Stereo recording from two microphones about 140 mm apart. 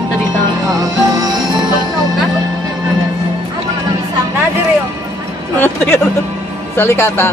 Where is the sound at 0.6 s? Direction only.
25° right (ahead or behind).